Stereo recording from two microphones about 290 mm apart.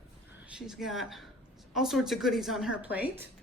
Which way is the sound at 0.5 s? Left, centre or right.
Centre.